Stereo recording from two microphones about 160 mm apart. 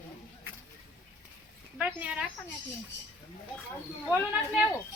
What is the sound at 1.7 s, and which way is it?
Speech, 5° right (ahead or behind).